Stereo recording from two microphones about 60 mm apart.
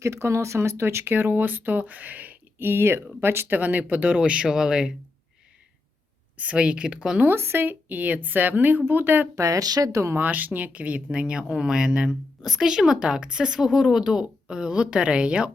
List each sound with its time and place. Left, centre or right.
0.0 s speech: right
2.6 s speech: right
3.6 s a woman's voice: right
6.3 s a woman's voice: right
7.3 s a woman's voice: right
9.3 s speech: right
10.2 s speech: right